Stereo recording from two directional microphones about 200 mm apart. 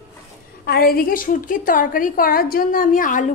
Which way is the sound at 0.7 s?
50° left (ahead or behind).